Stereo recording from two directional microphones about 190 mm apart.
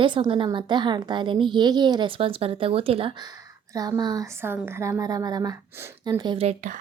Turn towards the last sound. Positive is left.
turn(degrees=-40)  # may be behind; listen again after turning